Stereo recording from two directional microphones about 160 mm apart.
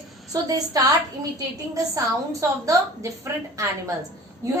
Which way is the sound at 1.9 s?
20° right (ahead or behind).